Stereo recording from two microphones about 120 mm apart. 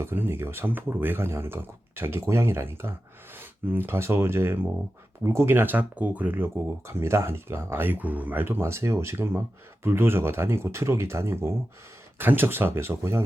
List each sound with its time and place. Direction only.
0.0 s speech: 20° right (ahead or behind)